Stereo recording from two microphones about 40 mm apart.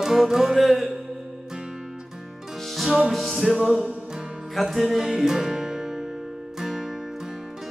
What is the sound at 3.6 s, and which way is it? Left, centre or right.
Music, centre.